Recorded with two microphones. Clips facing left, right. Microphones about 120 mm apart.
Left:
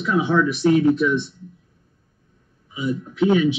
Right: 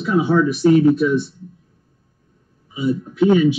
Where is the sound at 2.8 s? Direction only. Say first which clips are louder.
Right 4 dB; 40° right (ahead or behind).